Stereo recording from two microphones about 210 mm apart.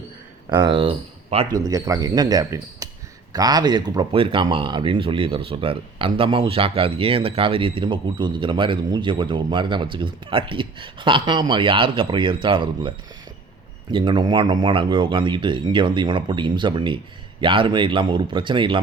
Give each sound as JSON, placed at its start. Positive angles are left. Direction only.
{"t": 0.5, "sound": "speech", "side_deg": -25}
{"t": 13.9, "sound": "speech", "side_deg": -25}